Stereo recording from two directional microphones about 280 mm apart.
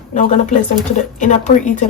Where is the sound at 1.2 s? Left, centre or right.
Left.